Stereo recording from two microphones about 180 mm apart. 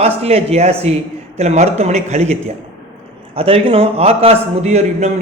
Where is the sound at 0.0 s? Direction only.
35° right (ahead or behind).